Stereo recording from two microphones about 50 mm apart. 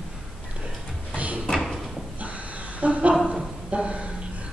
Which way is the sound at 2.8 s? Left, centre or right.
Right.